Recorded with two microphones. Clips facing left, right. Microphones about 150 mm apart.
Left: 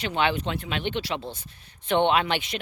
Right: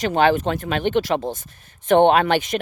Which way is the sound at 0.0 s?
40° right (ahead or behind).